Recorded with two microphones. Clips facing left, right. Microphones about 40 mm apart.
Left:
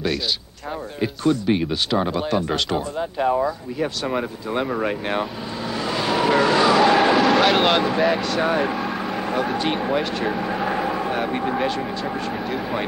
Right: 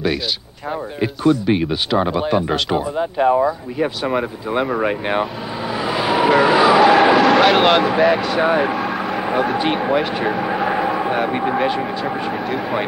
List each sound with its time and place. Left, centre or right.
1.0 s speech: centre
5.8 s vehicle: centre
8.3 s speech: centre
8.7 s vehicle: centre
9.2 s vehicle: centre
9.6 s speech: centre